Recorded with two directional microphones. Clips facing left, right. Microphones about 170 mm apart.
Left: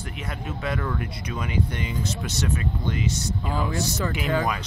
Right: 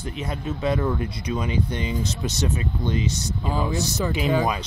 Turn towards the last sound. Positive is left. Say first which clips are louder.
# right 3 dB
turn(degrees=-20)  # may be behind; listen again after turning